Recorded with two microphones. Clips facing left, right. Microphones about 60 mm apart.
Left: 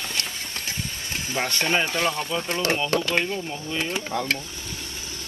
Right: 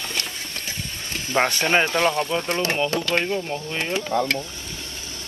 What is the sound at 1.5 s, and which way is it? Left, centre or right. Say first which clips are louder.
Speech: right 3 dB; right.